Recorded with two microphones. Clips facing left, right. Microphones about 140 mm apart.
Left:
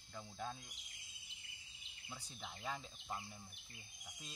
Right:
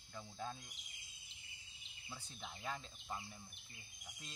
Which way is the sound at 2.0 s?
10° left (ahead or behind).